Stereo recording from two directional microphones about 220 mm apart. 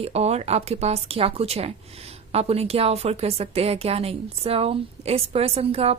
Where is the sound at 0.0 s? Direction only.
30° right (ahead or behind).